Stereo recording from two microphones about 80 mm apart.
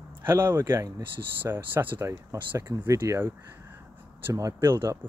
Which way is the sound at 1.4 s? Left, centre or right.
Right.